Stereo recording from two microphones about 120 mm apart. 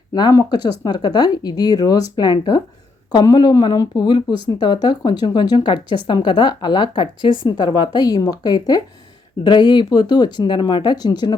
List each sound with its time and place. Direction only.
0.1 s speech: 35° left (ahead or behind)